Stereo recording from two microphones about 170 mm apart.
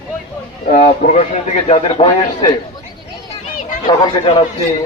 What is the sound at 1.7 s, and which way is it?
Speech, 35° left (ahead or behind).